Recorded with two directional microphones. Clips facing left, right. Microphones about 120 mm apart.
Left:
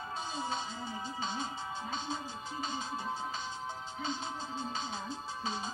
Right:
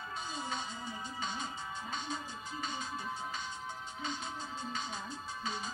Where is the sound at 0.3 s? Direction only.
30° left (ahead or behind).